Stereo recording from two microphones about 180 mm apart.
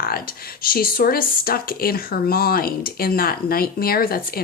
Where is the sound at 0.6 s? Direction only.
55° left (ahead or behind).